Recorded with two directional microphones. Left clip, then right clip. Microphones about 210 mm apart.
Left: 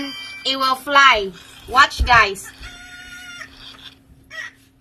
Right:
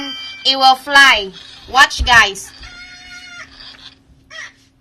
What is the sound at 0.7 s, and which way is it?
Speech, 40° right (ahead or behind).